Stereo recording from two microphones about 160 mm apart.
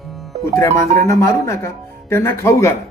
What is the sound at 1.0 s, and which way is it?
A man's voice, 20° left (ahead or behind).